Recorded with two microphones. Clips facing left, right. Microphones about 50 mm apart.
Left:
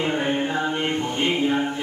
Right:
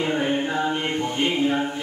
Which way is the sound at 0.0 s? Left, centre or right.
Centre.